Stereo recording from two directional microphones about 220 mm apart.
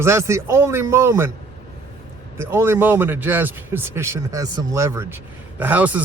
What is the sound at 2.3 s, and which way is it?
A man's voice, 10° right (ahead or behind).